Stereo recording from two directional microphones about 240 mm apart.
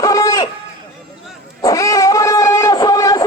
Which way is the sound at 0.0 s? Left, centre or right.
Centre.